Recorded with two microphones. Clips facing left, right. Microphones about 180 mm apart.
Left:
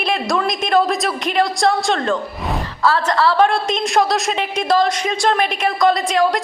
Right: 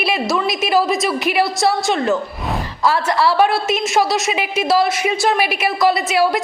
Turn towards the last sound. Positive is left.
turn(degrees=-5)  # may be behind; listen again after turning